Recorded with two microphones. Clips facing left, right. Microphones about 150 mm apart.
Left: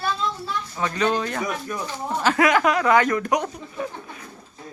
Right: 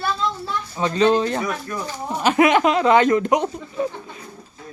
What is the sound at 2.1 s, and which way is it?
Speech, 20° right (ahead or behind).